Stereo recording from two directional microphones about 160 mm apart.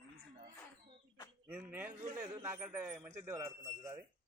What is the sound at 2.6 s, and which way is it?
A man's voice, 5° right (ahead or behind).